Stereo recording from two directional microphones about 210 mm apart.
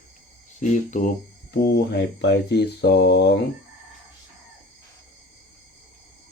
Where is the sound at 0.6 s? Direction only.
35° left (ahead or behind).